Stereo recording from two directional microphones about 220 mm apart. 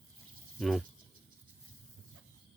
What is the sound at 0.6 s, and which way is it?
Speech, centre (ahead or behind).